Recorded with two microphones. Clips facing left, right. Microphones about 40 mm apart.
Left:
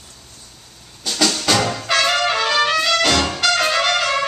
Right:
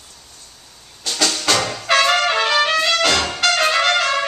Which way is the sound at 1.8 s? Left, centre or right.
Centre.